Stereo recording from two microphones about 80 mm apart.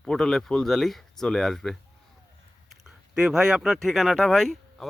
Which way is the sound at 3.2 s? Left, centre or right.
Centre.